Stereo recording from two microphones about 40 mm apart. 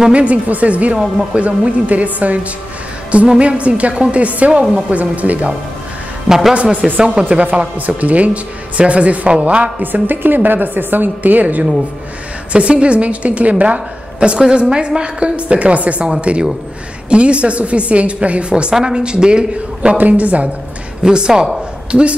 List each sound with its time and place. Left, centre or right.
0.1 s speech: right
3.3 s speech: right
6.2 s a man's voice: centre
6.5 s a woman's voice: right
7.8 s speech: right
10.0 s a woman's voice: right
12.5 s speech: right
14.4 s a woman's voice: right
18.5 s a woman's voice: centre
20.0 s speech: right
21.0 s a woman's voice: centre